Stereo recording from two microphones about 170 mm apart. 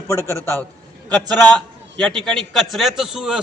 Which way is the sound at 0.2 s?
15° right (ahead or behind).